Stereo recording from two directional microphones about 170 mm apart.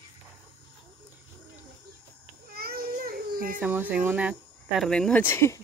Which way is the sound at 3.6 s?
10° right (ahead or behind).